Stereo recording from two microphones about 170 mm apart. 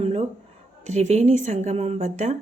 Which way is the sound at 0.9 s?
40° right (ahead or behind).